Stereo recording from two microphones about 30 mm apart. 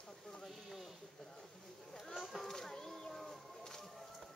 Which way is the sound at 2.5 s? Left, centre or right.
Centre.